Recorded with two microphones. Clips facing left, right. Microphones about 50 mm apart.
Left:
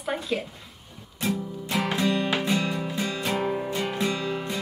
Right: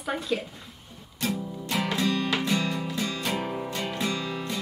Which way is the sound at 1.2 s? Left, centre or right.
Centre.